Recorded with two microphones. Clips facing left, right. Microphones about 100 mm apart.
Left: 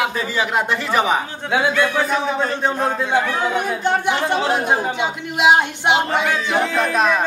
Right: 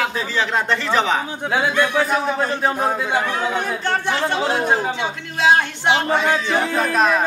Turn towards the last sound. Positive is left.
turn(degrees=0)  # may be behind; listen again after turning